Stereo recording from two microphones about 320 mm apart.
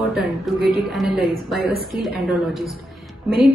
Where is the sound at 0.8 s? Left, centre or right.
Centre.